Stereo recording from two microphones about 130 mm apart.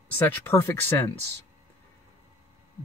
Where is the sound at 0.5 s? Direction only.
20° left (ahead or behind).